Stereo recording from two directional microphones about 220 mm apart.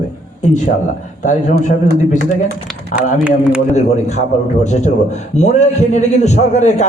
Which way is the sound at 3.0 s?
5° right (ahead or behind).